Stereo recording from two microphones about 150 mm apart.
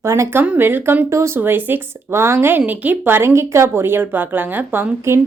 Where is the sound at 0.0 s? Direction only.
20° right (ahead or behind).